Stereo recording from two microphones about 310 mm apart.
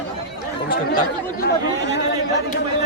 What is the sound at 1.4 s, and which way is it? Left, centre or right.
Speech, left.